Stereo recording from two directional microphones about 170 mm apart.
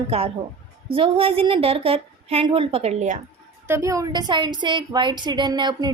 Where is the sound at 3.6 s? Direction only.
15° right (ahead or behind).